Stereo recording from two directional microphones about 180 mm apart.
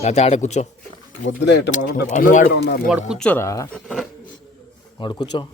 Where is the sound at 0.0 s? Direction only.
35° left (ahead or behind).